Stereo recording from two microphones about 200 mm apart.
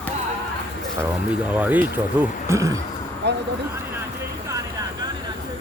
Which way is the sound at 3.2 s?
60° right (ahead or behind).